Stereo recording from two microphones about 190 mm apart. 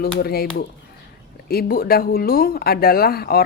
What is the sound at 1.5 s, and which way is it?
Speech, 55° left (ahead or behind).